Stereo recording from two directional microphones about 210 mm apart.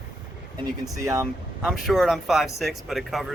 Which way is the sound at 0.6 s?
15° right (ahead or behind).